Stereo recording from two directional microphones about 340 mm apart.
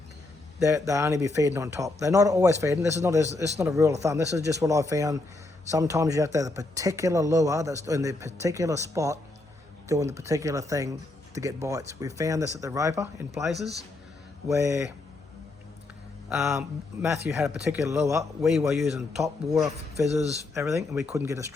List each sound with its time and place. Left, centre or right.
0.6 s speech: centre
16.3 s a man's voice: centre
20.1 s speech: centre
20.5 s speech: centre